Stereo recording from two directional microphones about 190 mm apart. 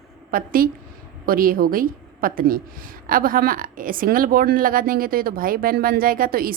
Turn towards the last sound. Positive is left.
turn(degrees=-50)  # may be behind; listen again after turning